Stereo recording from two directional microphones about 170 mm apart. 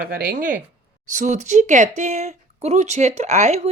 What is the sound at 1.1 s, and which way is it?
A woman's voice, 45° right (ahead or behind).